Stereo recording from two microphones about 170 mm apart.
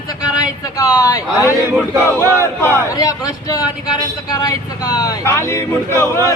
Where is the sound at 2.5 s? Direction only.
15° left (ahead or behind).